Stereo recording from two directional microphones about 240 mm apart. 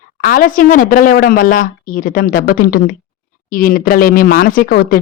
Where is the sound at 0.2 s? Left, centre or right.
Left.